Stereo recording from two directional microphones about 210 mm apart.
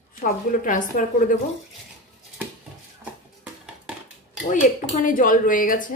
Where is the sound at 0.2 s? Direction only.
40° left (ahead or behind).